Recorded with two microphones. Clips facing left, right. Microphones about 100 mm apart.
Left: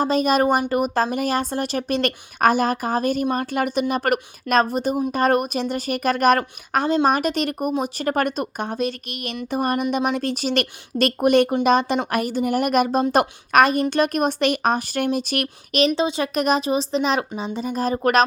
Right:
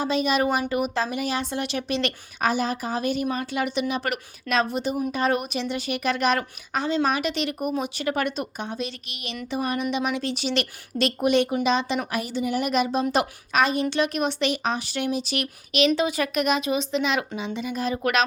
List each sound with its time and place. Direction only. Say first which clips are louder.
0.0 s speech: left 4 dB; 45° left (ahead or behind)
16.0 s speech: left 2 dB; 25° left (ahead or behind)